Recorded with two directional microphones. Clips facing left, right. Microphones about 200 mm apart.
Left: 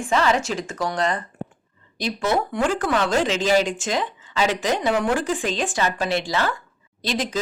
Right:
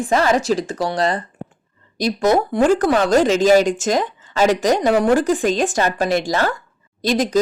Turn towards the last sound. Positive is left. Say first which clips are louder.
# right 7 dB
turn(degrees=-40)  # may be behind; listen again after turning